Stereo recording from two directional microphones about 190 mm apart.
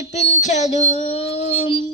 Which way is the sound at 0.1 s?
35° left (ahead or behind).